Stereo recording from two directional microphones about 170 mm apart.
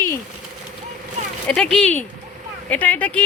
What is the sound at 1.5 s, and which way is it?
Speech, 5° left (ahead or behind).